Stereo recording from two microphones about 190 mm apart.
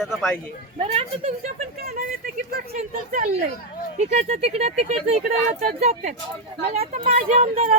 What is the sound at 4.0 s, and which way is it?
A woman's voice, 35° right (ahead or behind).